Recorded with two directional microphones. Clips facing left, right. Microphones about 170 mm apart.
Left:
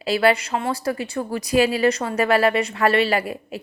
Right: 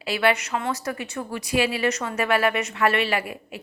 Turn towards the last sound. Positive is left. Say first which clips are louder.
# left 4 dB
turn(degrees=35)  # may be behind; listen again after turning